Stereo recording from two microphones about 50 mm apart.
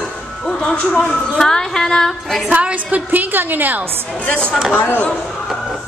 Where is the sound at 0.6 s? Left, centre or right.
Centre.